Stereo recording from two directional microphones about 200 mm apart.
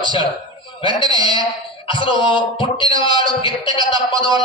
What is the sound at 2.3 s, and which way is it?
Speech, 25° left (ahead or behind).